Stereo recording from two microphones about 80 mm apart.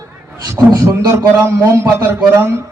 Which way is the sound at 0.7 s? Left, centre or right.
Right.